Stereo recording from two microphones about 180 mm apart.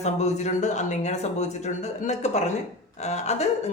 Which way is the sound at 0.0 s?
40° left (ahead or behind).